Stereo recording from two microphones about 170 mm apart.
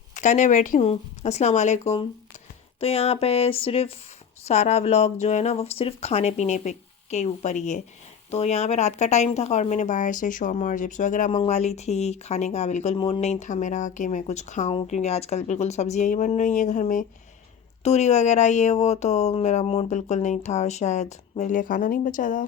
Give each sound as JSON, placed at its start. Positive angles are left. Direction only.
{"t": 0.1, "sound": "speech", "side_deg": 45}